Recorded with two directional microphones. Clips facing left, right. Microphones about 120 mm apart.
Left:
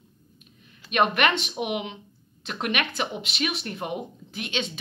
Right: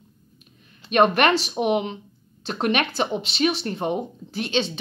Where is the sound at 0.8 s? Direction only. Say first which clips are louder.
Right 5 dB; 35° right (ahead or behind).